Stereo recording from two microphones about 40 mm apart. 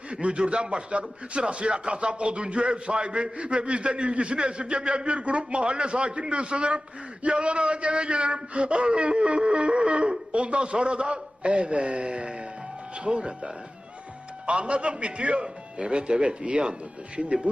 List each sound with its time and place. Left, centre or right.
0.1 s a man's voice: right